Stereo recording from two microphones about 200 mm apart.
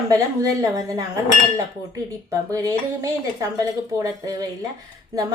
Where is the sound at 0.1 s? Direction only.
15° right (ahead or behind).